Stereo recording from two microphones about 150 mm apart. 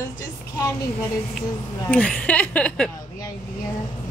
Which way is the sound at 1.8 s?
10° left (ahead or behind).